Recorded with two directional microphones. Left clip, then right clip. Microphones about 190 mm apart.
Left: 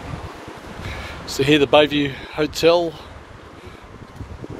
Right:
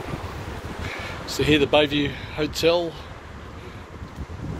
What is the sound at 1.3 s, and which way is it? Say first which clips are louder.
Speech: left 4 dB; 35° left (ahead or behind).